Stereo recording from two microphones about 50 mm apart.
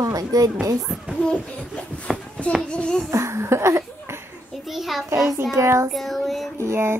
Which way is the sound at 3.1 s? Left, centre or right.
Right.